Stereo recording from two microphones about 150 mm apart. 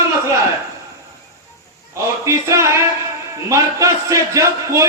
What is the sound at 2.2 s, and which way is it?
A man's voice, 20° right (ahead or behind).